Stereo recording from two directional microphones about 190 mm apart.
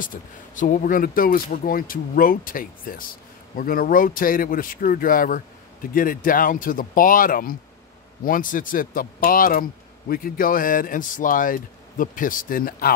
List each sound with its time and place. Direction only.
0.0 s speech: 45° left (ahead or behind)